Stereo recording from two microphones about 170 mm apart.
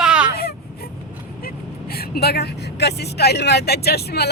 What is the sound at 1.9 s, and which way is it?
Speech, 65° left (ahead or behind).